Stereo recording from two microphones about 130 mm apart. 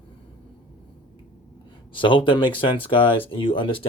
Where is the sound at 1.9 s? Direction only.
40° left (ahead or behind).